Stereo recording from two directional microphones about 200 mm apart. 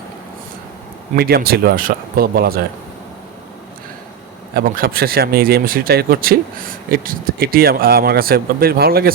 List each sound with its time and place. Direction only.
1.1 s speech: 50° right (ahead or behind)
4.5 s speech: 45° right (ahead or behind)